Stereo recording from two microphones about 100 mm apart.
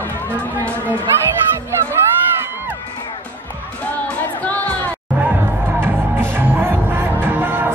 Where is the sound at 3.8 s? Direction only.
15° left (ahead or behind).